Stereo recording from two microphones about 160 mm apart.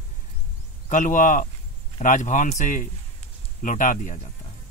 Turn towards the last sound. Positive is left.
turn(degrees=50)  # may be behind; listen again after turning